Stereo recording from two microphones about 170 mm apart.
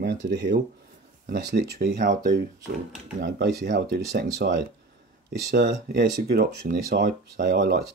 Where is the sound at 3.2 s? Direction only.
90° right.